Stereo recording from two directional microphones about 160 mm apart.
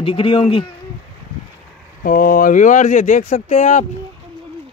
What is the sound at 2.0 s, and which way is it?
Speech, 65° left (ahead or behind).